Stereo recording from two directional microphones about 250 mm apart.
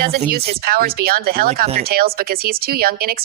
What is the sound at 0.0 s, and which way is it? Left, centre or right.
Speech, right.